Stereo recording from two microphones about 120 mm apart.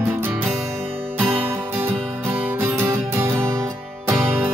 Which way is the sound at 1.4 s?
20° right (ahead or behind).